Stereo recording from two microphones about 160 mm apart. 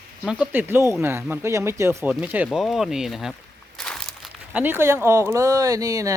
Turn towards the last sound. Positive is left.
turn(degrees=-20)  # may be behind; listen again after turning